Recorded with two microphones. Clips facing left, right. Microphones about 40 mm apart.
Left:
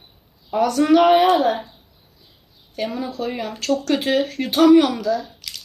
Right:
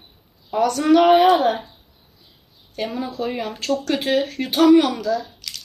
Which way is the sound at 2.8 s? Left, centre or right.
Centre.